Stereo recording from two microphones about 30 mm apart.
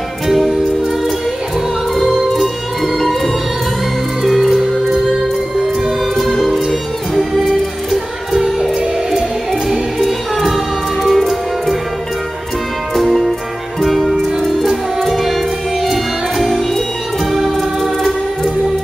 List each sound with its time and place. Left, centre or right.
2.0 s music: centre
6.3 s music: centre
7.3 s music: centre
10.0 s music: centre
12.9 s music: centre